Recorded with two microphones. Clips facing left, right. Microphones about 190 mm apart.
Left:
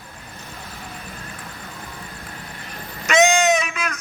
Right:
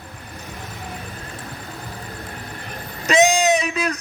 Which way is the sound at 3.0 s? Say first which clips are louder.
Even; 35° right (ahead or behind).